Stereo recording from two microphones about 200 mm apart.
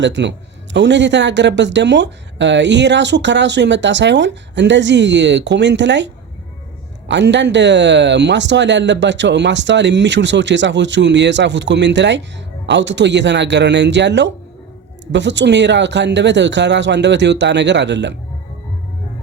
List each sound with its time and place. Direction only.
0.0 s a man's voice: 60° right (ahead or behind)
7.1 s a man's voice: 60° right (ahead or behind)